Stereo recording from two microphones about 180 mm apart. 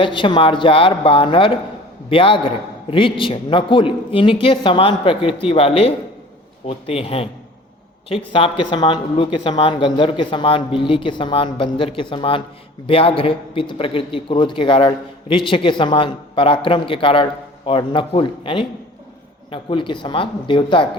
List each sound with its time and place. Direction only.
0.0 s a man's voice: 25° left (ahead or behind)